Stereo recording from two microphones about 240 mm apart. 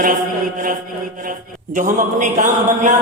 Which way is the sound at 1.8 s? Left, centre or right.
Right.